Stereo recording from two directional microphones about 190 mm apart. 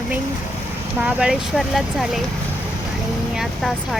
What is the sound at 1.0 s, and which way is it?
Speech, 5° right (ahead or behind).